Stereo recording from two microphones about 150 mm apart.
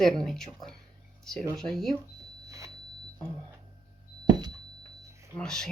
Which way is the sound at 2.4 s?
20° right (ahead or behind).